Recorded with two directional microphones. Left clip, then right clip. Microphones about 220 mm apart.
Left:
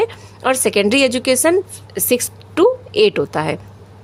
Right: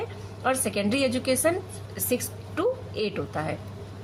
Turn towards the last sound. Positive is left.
turn(degrees=50)  # may be behind; listen again after turning